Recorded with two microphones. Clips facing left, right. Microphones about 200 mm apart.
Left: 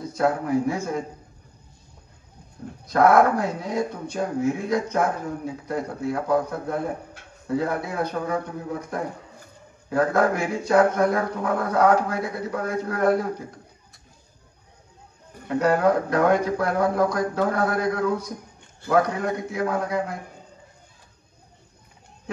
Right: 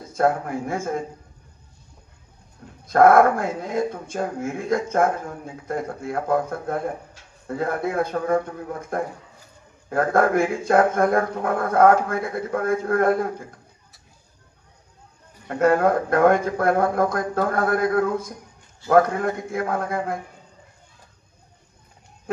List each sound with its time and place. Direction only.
0.1 s speech: 50° right (ahead or behind)
2.9 s speech: 50° right (ahead or behind)
9.8 s speech: 50° right (ahead or behind)
15.4 s speech: 50° right (ahead or behind)